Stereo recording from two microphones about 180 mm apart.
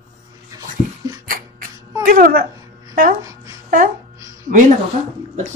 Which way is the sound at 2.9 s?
55° right (ahead or behind).